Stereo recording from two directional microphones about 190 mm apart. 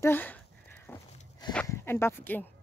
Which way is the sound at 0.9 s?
15° left (ahead or behind).